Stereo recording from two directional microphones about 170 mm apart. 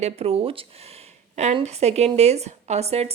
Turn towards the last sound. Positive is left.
turn(degrees=-40)  # may be behind; listen again after turning